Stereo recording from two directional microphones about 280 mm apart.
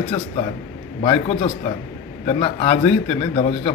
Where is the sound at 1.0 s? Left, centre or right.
Centre.